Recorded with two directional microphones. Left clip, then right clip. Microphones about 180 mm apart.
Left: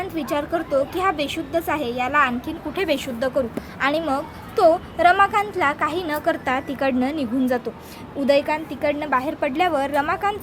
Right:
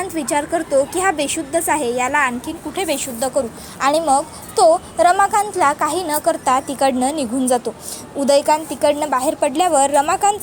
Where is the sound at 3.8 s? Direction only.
15° right (ahead or behind).